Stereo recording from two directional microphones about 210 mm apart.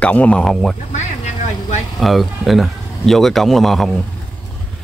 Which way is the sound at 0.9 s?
35° left (ahead or behind).